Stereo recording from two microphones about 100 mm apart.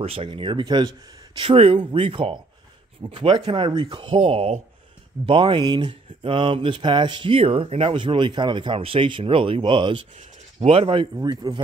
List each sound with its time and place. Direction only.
0.0 s speech: 65° right (ahead or behind)
3.0 s speech: 50° right (ahead or behind); by 4.6 s 80° right
5.2 s speech: 55° right (ahead or behind)
8.7 s speech: 70° right (ahead or behind)
10.6 s speech: 80° right
11.5 s speech: 35° right (ahead or behind)